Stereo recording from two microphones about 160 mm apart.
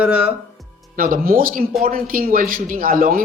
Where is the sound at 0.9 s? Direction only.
65° right (ahead or behind).